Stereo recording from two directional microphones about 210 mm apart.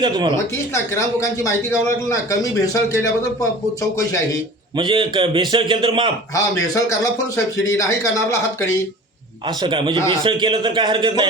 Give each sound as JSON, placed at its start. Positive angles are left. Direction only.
{"t": 0.0, "sound": "a man's voice", "side_deg": -20}
{"t": 0.7, "sound": "a man's voice", "side_deg": 15}
{"t": 4.8, "sound": "a man's voice", "side_deg": -25}
{"t": 6.7, "sound": "a man's voice", "side_deg": 15}
{"t": 9.6, "sound": "a man's voice", "side_deg": -25}